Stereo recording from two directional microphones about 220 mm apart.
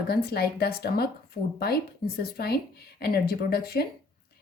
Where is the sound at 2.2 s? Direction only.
45° left (ahead or behind).